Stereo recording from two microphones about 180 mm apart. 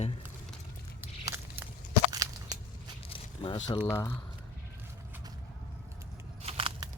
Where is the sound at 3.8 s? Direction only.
15° left (ahead or behind).